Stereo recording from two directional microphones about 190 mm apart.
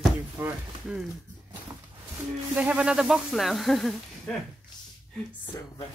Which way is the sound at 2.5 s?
5° right (ahead or behind).